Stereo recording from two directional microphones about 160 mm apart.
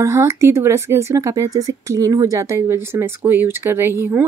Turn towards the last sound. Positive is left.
turn(degrees=-15)  # may be behind; listen again after turning